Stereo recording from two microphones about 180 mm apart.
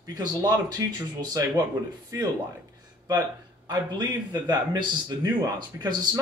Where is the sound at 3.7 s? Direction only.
25° right (ahead or behind).